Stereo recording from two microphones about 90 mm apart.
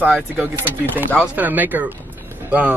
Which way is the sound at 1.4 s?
20° right (ahead or behind).